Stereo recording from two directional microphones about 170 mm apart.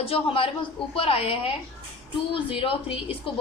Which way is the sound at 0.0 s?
35° left (ahead or behind).